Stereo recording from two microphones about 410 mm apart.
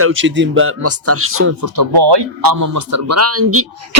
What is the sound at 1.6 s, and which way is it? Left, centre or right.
Speech, right.